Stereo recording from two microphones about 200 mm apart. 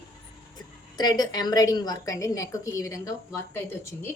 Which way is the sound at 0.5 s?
20° left (ahead or behind).